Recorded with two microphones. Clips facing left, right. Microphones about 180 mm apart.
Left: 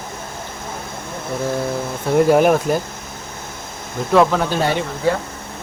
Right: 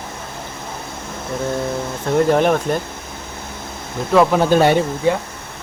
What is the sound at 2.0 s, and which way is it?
Speech, 5° left (ahead or behind).